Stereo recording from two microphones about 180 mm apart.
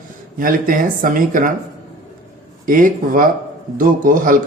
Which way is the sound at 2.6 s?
50° right (ahead or behind).